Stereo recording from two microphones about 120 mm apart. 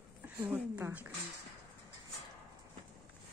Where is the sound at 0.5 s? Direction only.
15° right (ahead or behind).